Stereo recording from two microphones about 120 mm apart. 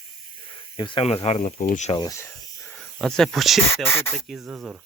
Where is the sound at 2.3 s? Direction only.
5° left (ahead or behind).